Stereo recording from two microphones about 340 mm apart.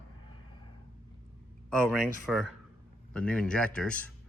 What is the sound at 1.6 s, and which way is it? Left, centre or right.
A man's voice, centre.